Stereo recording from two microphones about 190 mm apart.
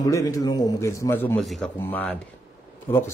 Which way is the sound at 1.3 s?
Centre (ahead or behind).